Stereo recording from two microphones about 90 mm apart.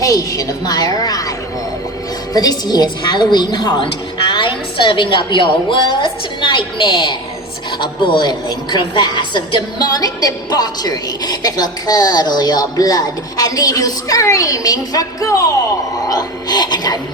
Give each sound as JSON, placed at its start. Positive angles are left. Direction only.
{"t": 0.0, "sound": "a woman's voice", "side_deg": 40}
{"t": 2.3, "sound": "a woman's voice", "side_deg": 45}
{"t": 4.3, "sound": "a woman's voice", "side_deg": 65}